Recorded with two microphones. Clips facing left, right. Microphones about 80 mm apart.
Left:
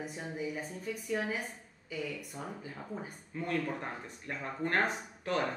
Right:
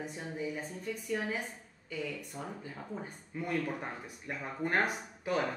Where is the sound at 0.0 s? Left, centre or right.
Centre.